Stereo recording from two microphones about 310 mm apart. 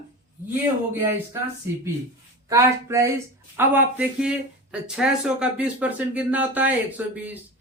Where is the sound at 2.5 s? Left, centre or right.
Centre.